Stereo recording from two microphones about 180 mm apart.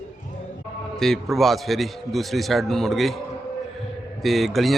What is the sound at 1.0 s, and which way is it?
A man's voice, centre (ahead or behind).